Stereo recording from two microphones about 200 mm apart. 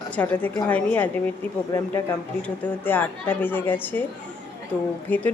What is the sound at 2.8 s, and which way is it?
Speech, 10° left (ahead or behind).